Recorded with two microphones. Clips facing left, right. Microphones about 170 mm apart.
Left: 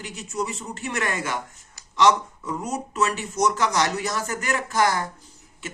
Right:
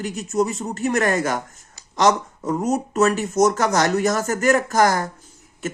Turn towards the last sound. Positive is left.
turn(degrees=-45)  # may be behind; listen again after turning